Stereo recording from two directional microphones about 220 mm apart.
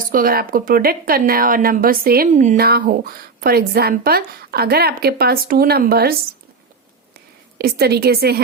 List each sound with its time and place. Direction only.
0.1 s a woman's voice: 40° right (ahead or behind)
7.6 s a woman's voice: 45° right (ahead or behind)